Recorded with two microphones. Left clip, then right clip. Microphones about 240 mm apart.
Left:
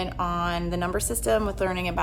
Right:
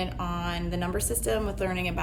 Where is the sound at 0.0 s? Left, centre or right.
Centre.